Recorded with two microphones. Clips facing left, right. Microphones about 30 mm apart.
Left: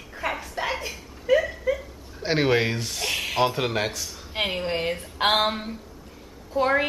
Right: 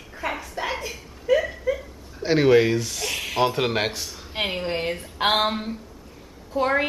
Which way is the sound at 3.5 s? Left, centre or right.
Centre.